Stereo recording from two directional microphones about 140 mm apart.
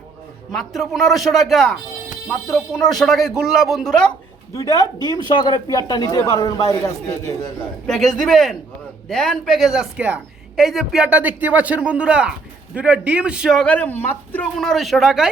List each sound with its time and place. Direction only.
0.5 s speech: centre (ahead or behind)
4.5 s speech: 25° left (ahead or behind)
7.9 s a man's voice: centre (ahead or behind)
13.7 s speech: 10° left (ahead or behind)
14.6 s speech: centre (ahead or behind)